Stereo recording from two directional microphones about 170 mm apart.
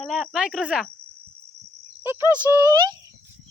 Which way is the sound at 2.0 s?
15° right (ahead or behind).